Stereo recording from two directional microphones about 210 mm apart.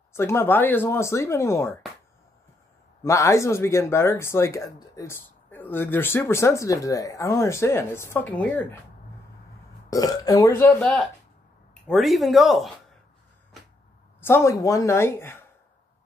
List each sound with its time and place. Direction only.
0.1 s speech: 10° left (ahead or behind)
3.0 s speech: 15° left (ahead or behind)
9.8 s speech: 15° left (ahead or behind); by 12.7 s centre (ahead or behind)
14.2 s speech: 10° left (ahead or behind)